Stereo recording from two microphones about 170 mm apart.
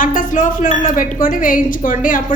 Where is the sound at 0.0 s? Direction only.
55° left (ahead or behind).